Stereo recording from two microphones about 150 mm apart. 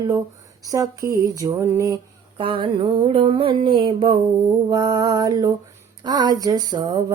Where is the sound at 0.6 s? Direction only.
20° right (ahead or behind).